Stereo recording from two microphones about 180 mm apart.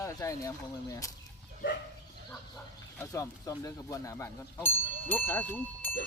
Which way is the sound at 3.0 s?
15° left (ahead or behind).